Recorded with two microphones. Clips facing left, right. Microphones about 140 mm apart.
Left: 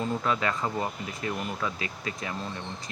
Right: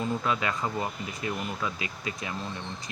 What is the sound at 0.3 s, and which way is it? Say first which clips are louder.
Speech: left 1 dB; 15° right (ahead or behind).